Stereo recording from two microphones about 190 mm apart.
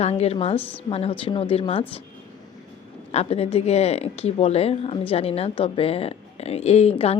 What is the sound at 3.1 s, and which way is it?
Speech, 35° left (ahead or behind).